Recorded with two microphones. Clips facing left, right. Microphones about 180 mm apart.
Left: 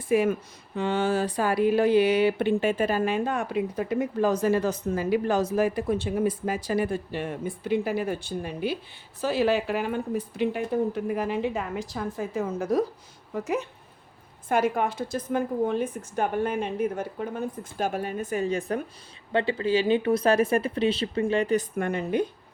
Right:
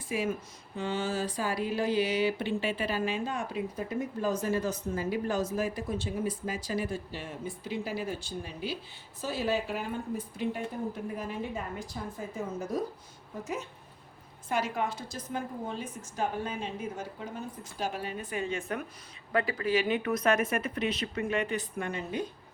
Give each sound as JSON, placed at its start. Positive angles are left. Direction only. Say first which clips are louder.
{"t": 0.1, "sound": "speech", "louder": "left 9 dB", "side_deg": 60}
{"t": 9.2, "sound": "a woman's voice", "louder": "left 7 dB", "side_deg": 75}
{"t": 13.3, "sound": "speech", "louder": "left 8 dB", "side_deg": 65}
{"t": 14.5, "sound": "speech", "louder": "left 7 dB", "side_deg": 55}